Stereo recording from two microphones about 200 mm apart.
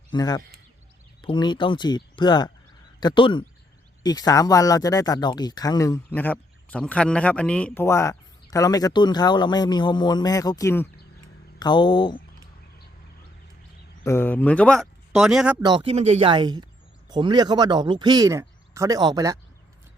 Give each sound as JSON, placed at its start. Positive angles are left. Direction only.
{"t": 0.1, "sound": "speech", "side_deg": 20}
{"t": 14.0, "sound": "speech", "side_deg": 10}
{"t": 15.6, "sound": "speech", "side_deg": -25}